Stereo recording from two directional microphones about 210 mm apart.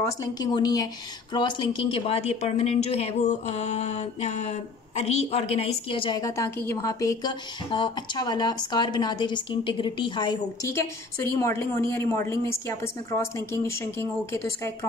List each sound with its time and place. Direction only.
0.0 s a woman's voice: 20° left (ahead or behind)